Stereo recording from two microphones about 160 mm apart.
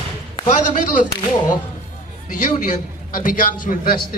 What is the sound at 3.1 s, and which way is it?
Speech, 60° left (ahead or behind).